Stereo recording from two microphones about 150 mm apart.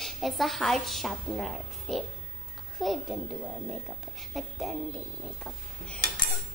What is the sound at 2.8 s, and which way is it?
Hands, centre (ahead or behind).